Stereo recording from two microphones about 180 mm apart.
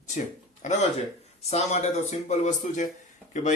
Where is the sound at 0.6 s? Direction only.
40° left (ahead or behind).